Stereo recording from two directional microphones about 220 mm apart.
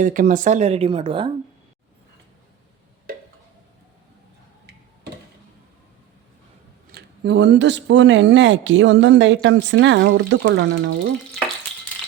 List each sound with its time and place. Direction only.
0.0 s speech: 40° right (ahead or behind)
6.9 s speech: 55° right (ahead or behind)